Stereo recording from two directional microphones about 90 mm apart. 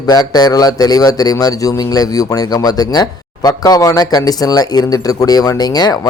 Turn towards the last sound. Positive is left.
turn(degrees=50)  # may be behind; listen again after turning